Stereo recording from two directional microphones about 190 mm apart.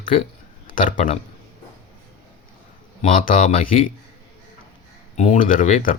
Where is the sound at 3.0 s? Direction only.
45° left (ahead or behind).